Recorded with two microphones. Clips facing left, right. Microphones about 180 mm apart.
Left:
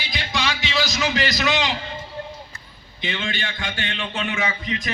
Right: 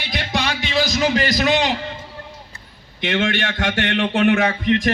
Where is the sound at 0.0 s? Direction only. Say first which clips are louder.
Right 3 dB; 65° right (ahead or behind).